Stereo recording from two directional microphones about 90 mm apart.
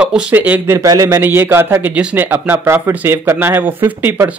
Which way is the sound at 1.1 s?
25° right (ahead or behind).